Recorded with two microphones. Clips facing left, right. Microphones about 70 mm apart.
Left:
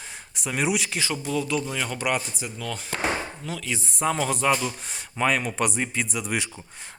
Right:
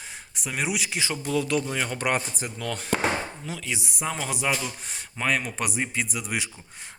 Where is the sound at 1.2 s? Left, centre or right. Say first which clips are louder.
Right 2 dB; right.